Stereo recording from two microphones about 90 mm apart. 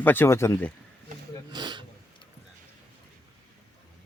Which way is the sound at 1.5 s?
55° right (ahead or behind).